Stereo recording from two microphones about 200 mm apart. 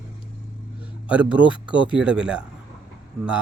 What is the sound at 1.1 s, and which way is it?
Speech, 5° right (ahead or behind).